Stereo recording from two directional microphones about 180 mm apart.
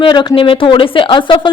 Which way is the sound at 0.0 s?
25° left (ahead or behind).